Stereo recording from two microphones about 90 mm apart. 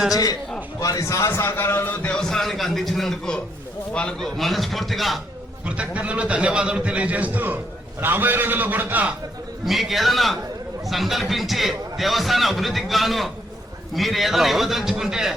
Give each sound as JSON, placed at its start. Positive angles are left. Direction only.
{"t": 0.1, "sound": "a man's voice", "side_deg": 45}
{"t": 1.3, "sound": "a man's voice", "side_deg": 25}
{"t": 5.6, "sound": "a man's voice", "side_deg": -15}
{"t": 9.6, "sound": "a man's voice", "side_deg": 0}